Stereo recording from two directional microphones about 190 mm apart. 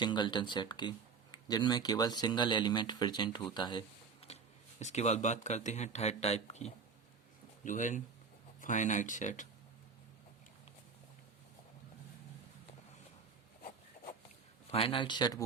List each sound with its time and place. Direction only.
0.0 s speech: 25° left (ahead or behind)
4.3 s a sound: 35° left (ahead or behind)
4.8 s speech: 35° left (ahead or behind)
14.7 s speech: 30° left (ahead or behind)